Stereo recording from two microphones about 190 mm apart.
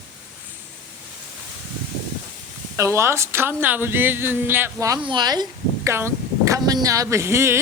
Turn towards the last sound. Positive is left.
turn(degrees=-15)  # may be behind; listen again after turning